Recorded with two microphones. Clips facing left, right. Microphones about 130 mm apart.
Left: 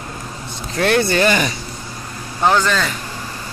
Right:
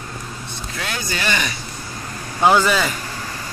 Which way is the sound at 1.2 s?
40° left (ahead or behind).